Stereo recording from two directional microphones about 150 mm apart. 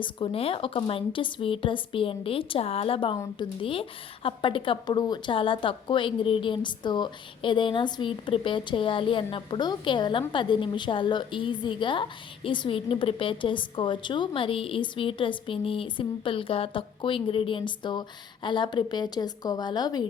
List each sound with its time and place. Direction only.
0.0 s a woman's voice: 35° left (ahead or behind)